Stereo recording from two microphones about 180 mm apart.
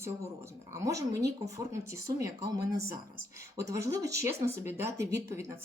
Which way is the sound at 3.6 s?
20° right (ahead or behind).